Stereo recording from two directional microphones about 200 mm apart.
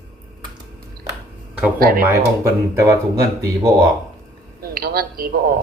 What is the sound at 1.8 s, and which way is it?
Speech, 45° right (ahead or behind).